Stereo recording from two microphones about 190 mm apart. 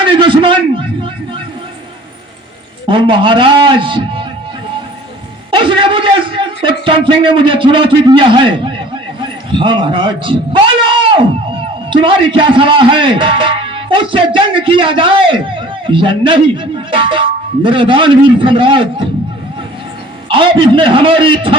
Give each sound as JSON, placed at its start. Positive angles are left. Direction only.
{"t": 0.0, "sound": "a sound", "side_deg": -25}
{"t": 2.8, "sound": "a man's voice", "side_deg": -25}
{"t": 5.5, "sound": "a man's voice", "side_deg": -25}
{"t": 20.3, "sound": "a man's voice", "side_deg": -25}